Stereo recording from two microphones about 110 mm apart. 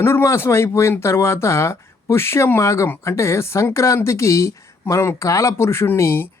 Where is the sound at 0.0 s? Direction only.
20° left (ahead or behind).